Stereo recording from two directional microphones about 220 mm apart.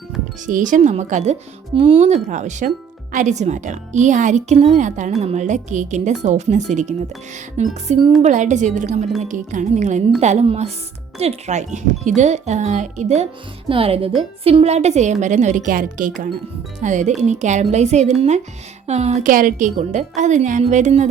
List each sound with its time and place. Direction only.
0.4 s a woman's voice: 35° right (ahead or behind)